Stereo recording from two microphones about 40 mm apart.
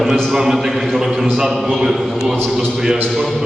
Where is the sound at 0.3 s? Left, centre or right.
Centre.